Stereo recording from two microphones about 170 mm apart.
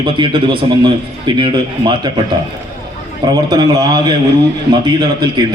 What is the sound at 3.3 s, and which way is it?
A man's voice, 25° right (ahead or behind).